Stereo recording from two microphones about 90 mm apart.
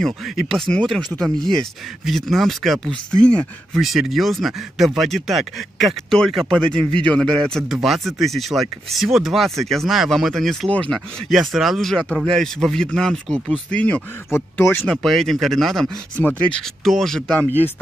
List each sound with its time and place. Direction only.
0.0 s speech: 5° left (ahead or behind)
3.8 s speech: centre (ahead or behind)
6.7 s speech: 80° right
7.2 s speech: 5° left (ahead or behind)
10.7 s speech: 15° left (ahead or behind)
11.2 s speech: centre (ahead or behind); by 14.0 s 15° left (ahead or behind)
14.3 s speech: 25° left (ahead or behind)
15.0 s speech: centre (ahead or behind)
16.3 s speech: 10° left (ahead or behind)
17.4 s speech: 20° left (ahead or behind)